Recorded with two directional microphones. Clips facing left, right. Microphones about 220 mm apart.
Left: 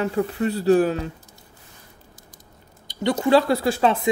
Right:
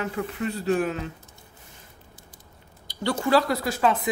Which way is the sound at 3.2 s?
25° left (ahead or behind).